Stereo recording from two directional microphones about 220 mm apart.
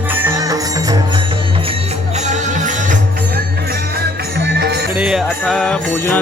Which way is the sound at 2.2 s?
35° right (ahead or behind).